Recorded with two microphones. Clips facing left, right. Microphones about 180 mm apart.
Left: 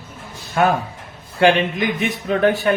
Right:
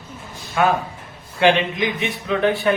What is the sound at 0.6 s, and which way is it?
Speech, 45° left (ahead or behind).